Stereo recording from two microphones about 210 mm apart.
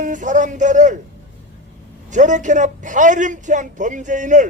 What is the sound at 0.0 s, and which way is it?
Speech, 35° right (ahead or behind).